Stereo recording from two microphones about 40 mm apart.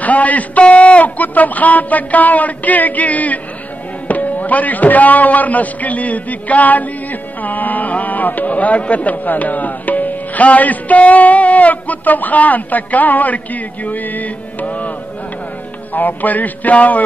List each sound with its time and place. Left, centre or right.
0.0 s a man's voice: left
1.0 s a man's voice: left
15.9 s a man's voice: left